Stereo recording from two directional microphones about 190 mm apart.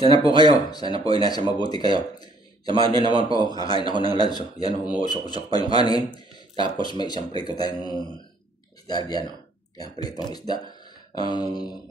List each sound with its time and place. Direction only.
0.2 s speech: 20° left (ahead or behind)
2.7 s a man's voice: 25° right (ahead or behind)
3.3 s speech: 20° left (ahead or behind)
6.1 s a sound: 25° right (ahead or behind)
6.8 s speech: 20° left (ahead or behind)